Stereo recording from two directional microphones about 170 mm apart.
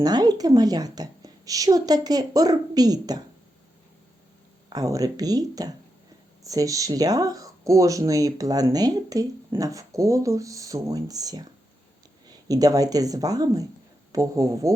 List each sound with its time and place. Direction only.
0.0 s speech: 25° right (ahead or behind)
4.7 s speech: 20° right (ahead or behind)